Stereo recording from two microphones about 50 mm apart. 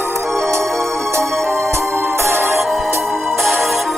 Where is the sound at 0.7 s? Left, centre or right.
Centre.